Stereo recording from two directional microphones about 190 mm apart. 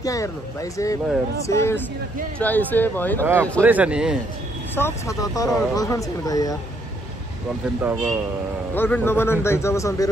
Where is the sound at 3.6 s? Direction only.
10° right (ahead or behind).